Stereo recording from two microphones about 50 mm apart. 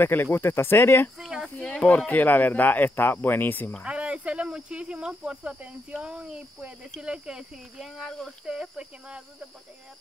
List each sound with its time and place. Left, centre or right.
0.0 s speech: left
1.1 s a sound: centre
1.6 s speech: left
1.9 s speech: left
3.8 s speech: right
8.5 s speech: centre